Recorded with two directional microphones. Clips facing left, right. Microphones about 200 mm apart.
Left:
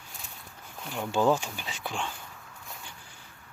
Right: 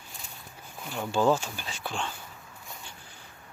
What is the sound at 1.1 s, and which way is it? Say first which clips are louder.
Speech: even; 15° left (ahead or behind).